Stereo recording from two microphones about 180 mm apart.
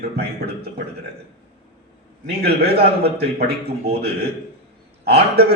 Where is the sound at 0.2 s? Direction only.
60° right (ahead or behind).